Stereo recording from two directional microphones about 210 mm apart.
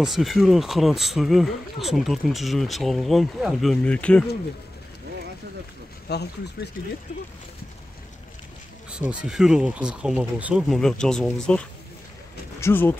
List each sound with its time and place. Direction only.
0.0 s speech: centre (ahead or behind)
6.0 s speech: 50° left (ahead or behind)
8.9 s speech: 5° right (ahead or behind); by 12.9 s 10° left (ahead or behind)